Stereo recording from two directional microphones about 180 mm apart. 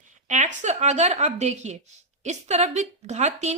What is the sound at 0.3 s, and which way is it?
A woman's voice, 40° right (ahead or behind).